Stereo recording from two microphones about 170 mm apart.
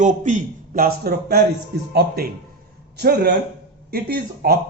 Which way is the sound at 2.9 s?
70° right (ahead or behind).